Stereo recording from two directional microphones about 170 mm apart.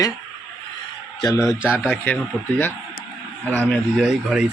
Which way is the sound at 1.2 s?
20° left (ahead or behind).